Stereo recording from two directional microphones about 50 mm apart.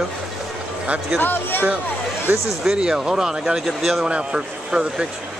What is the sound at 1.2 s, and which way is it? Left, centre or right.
Speech, left.